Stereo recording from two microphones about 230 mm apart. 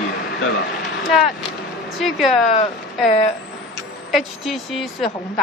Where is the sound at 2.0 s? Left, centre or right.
Centre.